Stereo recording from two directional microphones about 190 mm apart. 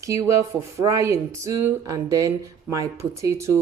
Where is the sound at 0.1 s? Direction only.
15° right (ahead or behind).